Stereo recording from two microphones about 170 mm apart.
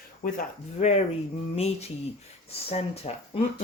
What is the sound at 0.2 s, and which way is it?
Speech, 50° left (ahead or behind).